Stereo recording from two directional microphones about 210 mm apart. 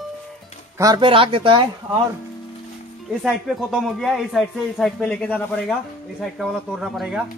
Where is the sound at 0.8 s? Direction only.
20° right (ahead or behind).